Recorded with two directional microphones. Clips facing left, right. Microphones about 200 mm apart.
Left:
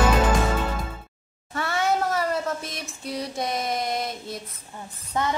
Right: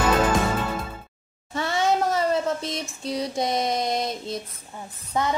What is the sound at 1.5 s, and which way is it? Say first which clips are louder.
Child singing: right 2 dB; 20° right (ahead or behind).